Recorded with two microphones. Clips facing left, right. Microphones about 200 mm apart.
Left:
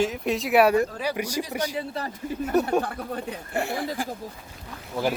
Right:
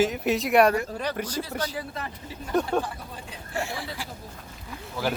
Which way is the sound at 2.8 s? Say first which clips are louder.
Left 7 dB; 60° left (ahead or behind).